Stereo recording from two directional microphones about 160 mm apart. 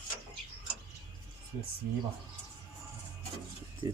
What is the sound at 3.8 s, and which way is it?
Speech, 20° right (ahead or behind).